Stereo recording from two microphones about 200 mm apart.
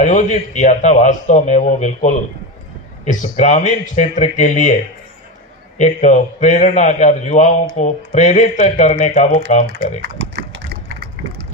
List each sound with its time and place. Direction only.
0.0 s a man's voice: 35° left (ahead or behind)
5.7 s a man's voice: 35° left (ahead or behind)
10.0 s pig: 60° right (ahead or behind)